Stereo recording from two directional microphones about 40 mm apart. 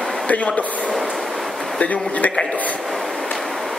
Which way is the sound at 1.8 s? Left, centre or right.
Left.